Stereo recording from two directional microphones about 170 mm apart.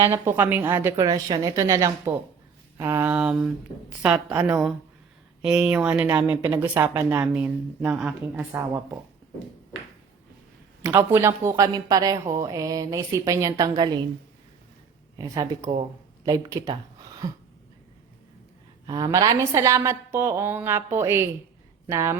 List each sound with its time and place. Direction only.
0.0 s a woman's voice: 15° right (ahead or behind)
10.8 s a woman's voice: 15° right (ahead or behind)
15.2 s a woman's voice: 25° right (ahead or behind)
18.9 s a woman's voice: 20° right (ahead or behind)